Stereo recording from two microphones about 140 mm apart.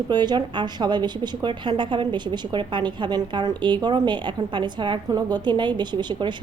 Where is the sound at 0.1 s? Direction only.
30° right (ahead or behind).